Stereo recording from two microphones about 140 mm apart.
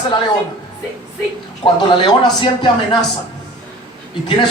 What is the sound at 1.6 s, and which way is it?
Speech, 35° left (ahead or behind).